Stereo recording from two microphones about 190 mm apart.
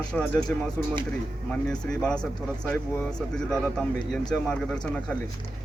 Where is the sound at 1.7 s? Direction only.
5° left (ahead or behind).